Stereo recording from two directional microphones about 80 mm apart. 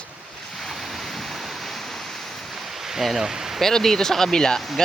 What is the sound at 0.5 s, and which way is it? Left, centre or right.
Waves, centre.